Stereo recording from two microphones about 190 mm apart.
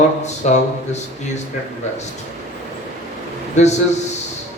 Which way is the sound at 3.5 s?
35° left (ahead or behind).